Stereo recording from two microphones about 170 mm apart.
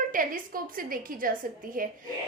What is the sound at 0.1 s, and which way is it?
A woman's voice, 55° right (ahead or behind).